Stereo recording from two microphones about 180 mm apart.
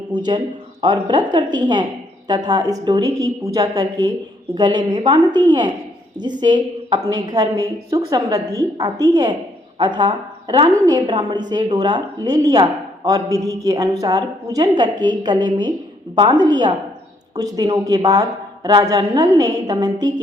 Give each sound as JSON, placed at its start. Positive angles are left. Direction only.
{"t": 0.3, "sound": "a woman's voice", "side_deg": -25}